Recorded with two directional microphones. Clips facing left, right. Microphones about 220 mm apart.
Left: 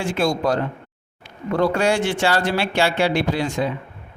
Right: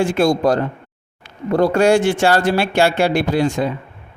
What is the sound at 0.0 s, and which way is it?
Speech, 45° right (ahead or behind).